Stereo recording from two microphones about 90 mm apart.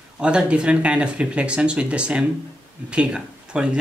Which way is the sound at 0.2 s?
10° right (ahead or behind).